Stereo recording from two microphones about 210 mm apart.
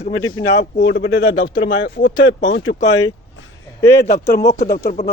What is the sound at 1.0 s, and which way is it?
Speech, 65° left (ahead or behind).